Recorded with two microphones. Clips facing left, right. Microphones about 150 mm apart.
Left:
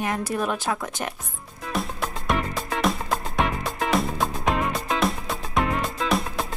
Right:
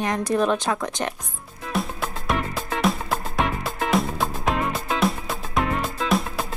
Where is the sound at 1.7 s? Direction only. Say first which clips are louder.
Right 1 dB; centre (ahead or behind).